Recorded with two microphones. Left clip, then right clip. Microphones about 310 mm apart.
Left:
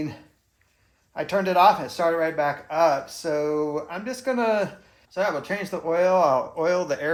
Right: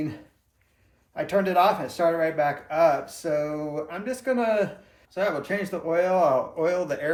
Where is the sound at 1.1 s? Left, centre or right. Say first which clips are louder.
Left 1 dB; centre.